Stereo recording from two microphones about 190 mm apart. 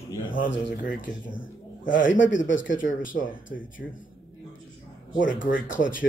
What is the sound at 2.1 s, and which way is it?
Speech, 80° left.